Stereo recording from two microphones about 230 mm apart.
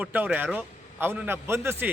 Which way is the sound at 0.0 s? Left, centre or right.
Centre.